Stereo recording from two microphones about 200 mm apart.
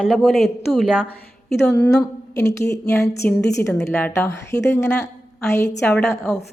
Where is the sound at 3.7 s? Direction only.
5° left (ahead or behind).